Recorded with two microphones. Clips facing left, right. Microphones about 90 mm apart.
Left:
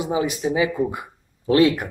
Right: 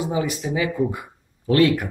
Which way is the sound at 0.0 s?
20° left (ahead or behind).